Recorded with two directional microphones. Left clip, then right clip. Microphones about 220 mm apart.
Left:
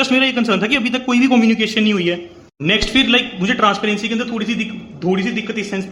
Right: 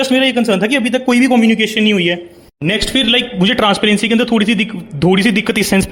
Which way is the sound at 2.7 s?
25° right (ahead or behind).